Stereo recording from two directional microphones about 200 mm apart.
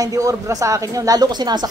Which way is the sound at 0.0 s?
15° right (ahead or behind).